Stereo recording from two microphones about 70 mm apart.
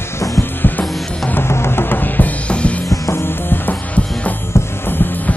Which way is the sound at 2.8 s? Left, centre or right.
Left.